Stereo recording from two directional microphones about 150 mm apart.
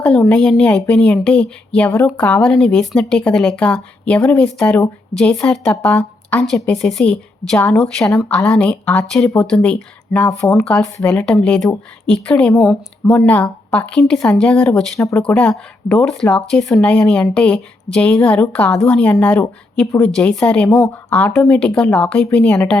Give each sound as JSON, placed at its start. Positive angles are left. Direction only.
{"t": 0.0, "sound": "speech", "side_deg": 5}
{"t": 10.5, "sound": "speech", "side_deg": 5}
{"t": 14.9, "sound": "speech", "side_deg": 20}
{"t": 15.3, "sound": "speech", "side_deg": 10}